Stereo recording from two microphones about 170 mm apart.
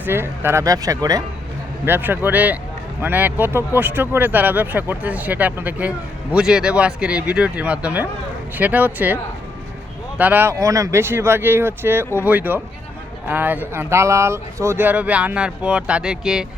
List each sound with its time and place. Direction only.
0.0 s speech: 15° right (ahead or behind)
10.2 s speech: 10° right (ahead or behind)